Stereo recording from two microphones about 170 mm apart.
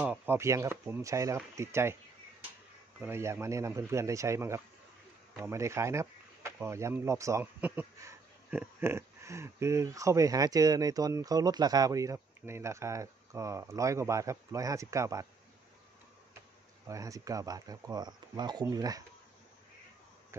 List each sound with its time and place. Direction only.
0.0 s speech: 10° right (ahead or behind)
3.0 s speech: 15° right (ahead or behind)
16.8 s speech: 20° right (ahead or behind)